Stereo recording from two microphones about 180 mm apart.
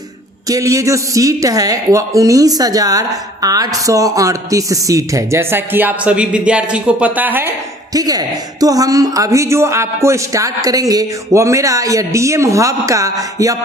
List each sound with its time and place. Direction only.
0.4 s a woman's voice: 20° right (ahead or behind)